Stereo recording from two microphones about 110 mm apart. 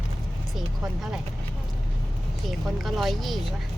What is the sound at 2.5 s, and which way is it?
Speech, centre (ahead or behind).